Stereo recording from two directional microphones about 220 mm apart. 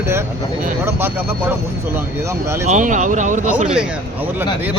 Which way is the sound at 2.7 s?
35° right (ahead or behind).